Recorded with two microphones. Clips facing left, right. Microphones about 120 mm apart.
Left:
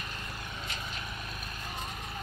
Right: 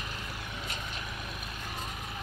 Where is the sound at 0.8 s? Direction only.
5° left (ahead or behind).